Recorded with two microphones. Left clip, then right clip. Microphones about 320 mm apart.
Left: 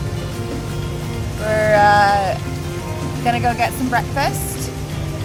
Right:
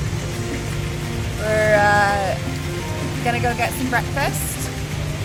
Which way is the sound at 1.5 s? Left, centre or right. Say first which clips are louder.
Left 3 dB; centre.